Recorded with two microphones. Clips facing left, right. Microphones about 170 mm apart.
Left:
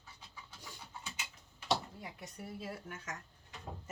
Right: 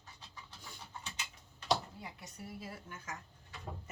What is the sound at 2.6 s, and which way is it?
Speech, 70° left (ahead or behind).